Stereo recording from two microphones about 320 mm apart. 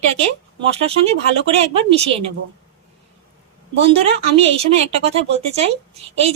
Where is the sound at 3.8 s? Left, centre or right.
Centre.